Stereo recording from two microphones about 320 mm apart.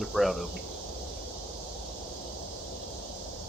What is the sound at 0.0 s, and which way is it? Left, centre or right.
Speech, centre.